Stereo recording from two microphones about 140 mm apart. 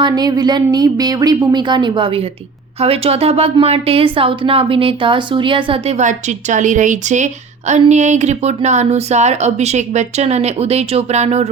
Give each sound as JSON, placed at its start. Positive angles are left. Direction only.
{"t": 0.0, "sound": "speech", "side_deg": -30}